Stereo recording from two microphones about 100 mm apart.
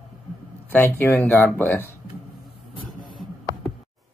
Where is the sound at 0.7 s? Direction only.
25° left (ahead or behind).